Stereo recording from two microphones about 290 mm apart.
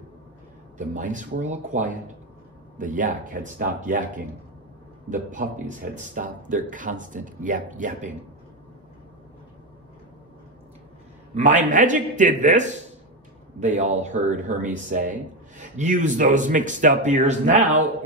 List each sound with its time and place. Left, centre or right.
0.7 s speech: right
11.3 s speech: right